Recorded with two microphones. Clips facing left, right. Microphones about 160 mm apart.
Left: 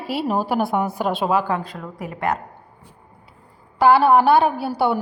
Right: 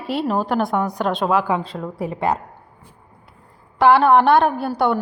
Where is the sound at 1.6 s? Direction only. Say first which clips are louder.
Right 5 dB; 30° right (ahead or behind).